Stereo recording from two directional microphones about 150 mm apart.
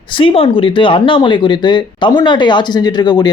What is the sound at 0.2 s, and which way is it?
Speech, 35° left (ahead or behind).